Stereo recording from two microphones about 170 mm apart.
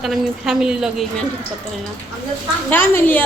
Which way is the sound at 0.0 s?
Centre (ahead or behind).